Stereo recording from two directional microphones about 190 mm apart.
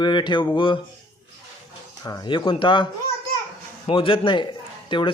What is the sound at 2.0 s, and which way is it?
Speech, 20° left (ahead or behind).